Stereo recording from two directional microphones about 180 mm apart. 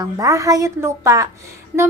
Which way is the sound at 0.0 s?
20° right (ahead or behind).